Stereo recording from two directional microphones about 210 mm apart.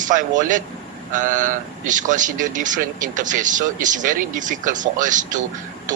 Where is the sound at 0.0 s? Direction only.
40° right (ahead or behind).